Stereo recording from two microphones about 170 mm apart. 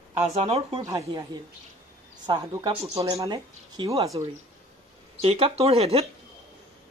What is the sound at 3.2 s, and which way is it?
Speech, 20° right (ahead or behind).